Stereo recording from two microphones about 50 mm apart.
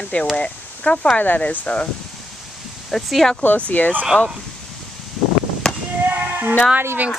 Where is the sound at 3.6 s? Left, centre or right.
Left.